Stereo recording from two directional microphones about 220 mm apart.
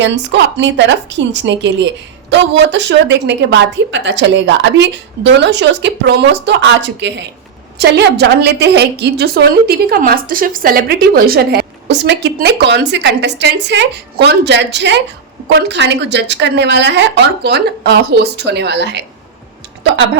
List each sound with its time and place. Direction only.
0.0 s a woman's voice: 55° right (ahead or behind)